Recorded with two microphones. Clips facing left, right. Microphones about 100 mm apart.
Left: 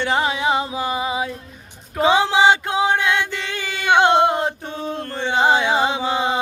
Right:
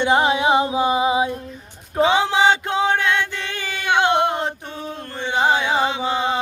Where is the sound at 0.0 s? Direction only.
20° right (ahead or behind).